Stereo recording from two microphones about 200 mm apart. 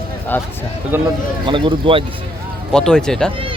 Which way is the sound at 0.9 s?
10° right (ahead or behind).